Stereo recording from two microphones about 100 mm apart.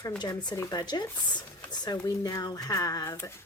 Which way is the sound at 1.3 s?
45° left (ahead or behind).